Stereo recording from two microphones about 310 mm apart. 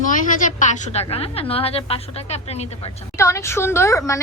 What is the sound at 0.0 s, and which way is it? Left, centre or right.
A woman's voice, left.